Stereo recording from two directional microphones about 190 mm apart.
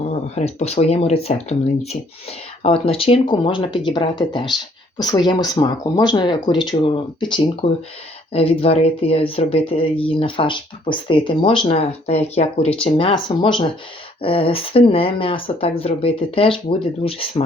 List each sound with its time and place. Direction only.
0.0 s speech: 35° left (ahead or behind)